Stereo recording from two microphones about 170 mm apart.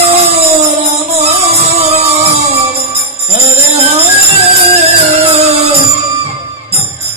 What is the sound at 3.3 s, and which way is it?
Music, 40° right (ahead or behind).